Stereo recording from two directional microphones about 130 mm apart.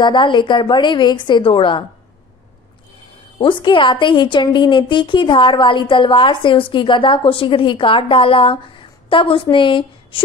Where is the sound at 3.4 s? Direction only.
40° left (ahead or behind).